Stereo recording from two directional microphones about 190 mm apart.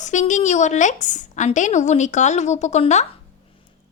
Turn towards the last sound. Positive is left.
turn(degrees=35)  # may be behind; listen again after turning